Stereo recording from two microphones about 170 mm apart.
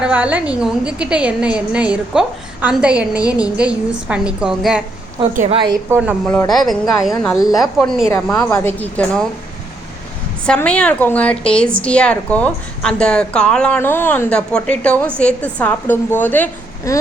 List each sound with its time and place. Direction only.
0.0 s a woman's voice: 10° right (ahead or behind)
5.9 s a woman's voice: 10° right (ahead or behind); by 9.2 s 10° left (ahead or behind)
10.4 s a woman's voice: 5° left (ahead or behind)